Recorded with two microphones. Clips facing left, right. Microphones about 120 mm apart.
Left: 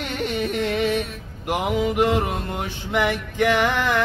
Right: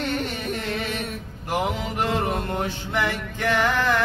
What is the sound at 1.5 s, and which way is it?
Male singing, 15° left (ahead or behind).